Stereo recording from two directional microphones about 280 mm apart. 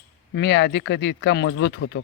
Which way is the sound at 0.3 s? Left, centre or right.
Left.